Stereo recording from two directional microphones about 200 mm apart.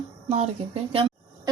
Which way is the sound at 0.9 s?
25° right (ahead or behind).